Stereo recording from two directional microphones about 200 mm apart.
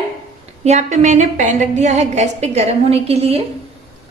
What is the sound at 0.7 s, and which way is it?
A woman's voice, 35° right (ahead or behind).